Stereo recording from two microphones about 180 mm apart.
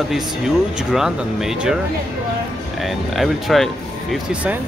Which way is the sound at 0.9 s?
Centre (ahead or behind).